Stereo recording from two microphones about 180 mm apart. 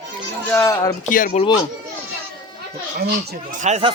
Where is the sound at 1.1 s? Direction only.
50° left (ahead or behind).